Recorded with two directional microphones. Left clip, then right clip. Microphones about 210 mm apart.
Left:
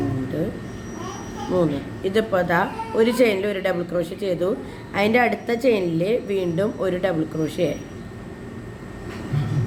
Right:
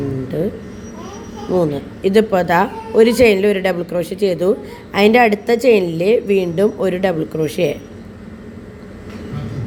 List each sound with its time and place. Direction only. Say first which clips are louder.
1.5 s a woman's voice: right 5 dB; 25° right (ahead or behind)